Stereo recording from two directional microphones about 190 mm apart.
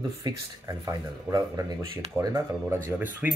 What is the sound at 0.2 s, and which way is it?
Speech, 20° right (ahead or behind).